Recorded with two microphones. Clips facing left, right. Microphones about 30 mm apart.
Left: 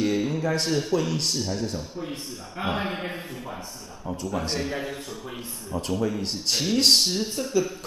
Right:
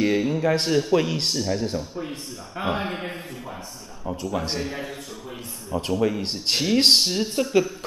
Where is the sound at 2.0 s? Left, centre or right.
Centre.